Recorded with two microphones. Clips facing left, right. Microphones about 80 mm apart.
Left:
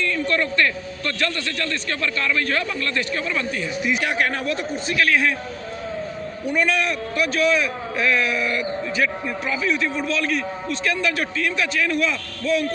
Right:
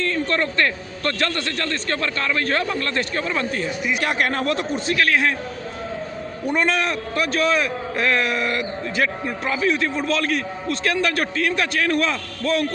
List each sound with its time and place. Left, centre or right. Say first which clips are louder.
0.0 s a sound: even; right
1.0 s a man's voice: right 2 dB; right
6.5 s a man's voice: right 1 dB; right
9.2 s a man's voice: right 1 dB; right
10.1 s a man's voice: right 1 dB; right